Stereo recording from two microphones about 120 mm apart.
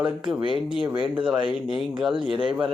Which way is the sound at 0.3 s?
45° right (ahead or behind).